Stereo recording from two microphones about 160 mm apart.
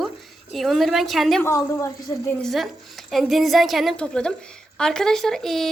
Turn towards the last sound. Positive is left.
turn(degrees=0)  # may be behind; listen again after turning